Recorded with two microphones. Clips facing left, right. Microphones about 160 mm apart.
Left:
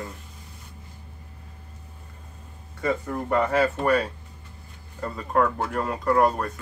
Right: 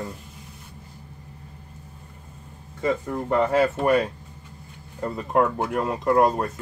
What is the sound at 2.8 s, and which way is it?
Speech, 20° right (ahead or behind).